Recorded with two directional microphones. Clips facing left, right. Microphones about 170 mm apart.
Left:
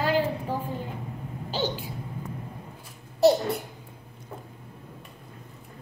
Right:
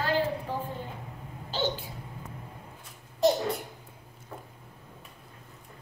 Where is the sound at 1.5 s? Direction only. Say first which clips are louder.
Left 1 dB; 15° left (ahead or behind).